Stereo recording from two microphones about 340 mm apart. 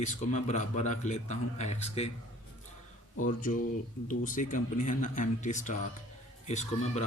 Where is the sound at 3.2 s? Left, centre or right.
Left.